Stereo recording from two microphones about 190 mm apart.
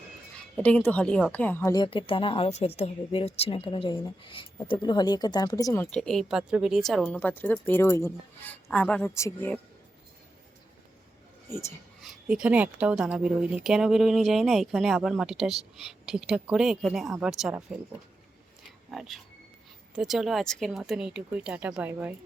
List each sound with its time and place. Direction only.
0.5 s a woman's voice: 5° left (ahead or behind)
11.4 s a woman's voice: 15° left (ahead or behind)
12.0 s a woman's voice: 5° right (ahead or behind)
18.9 s a woman's voice: centre (ahead or behind)